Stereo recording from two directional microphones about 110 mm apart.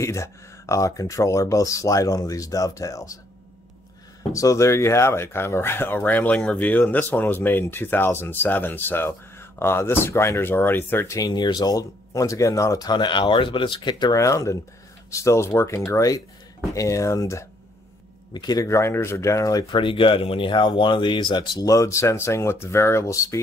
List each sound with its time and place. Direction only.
0.0 s speech: 25° left (ahead or behind)
4.3 s speech: 30° left (ahead or behind)
11.1 s speech: 40° left (ahead or behind)
14.1 s speech: 30° left (ahead or behind)
18.3 s speech: 40° left (ahead or behind)
19.7 s speech: 50° left (ahead or behind); by 23.4 s 25° left (ahead or behind)